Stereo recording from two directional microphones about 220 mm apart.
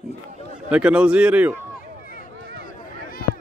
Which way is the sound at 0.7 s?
5° right (ahead or behind).